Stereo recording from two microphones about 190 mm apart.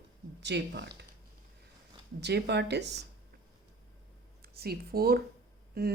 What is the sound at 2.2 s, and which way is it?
Speech, 60° right (ahead or behind).